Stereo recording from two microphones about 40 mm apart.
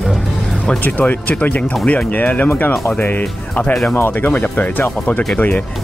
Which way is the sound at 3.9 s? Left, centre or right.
Left.